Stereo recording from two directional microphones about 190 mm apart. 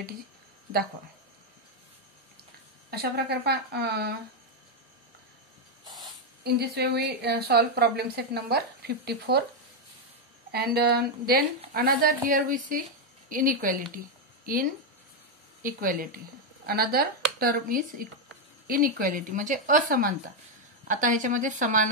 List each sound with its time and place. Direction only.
2.9 s a woman's voice: 55° right (ahead or behind)
6.4 s a woman's voice: 55° right (ahead or behind)
10.5 s a woman's voice: 55° right (ahead or behind)
13.9 s a sound: 50° right (ahead or behind)
15.6 s a woman's voice: 45° right (ahead or behind)